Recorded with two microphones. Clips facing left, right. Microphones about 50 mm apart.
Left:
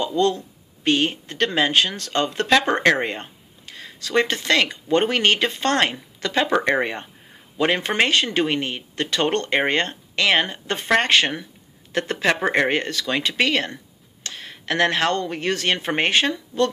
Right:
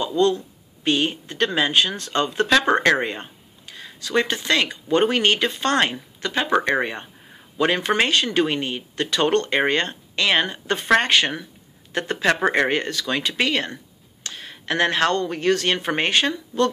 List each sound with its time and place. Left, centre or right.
0.0 s speech: left
2.7 s speech: left
3.0 s speech: left
4.6 s speech: left
6.2 s speech: left
6.6 s speech: left